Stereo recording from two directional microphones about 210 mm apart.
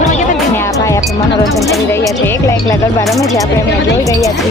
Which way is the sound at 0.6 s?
15° left (ahead or behind).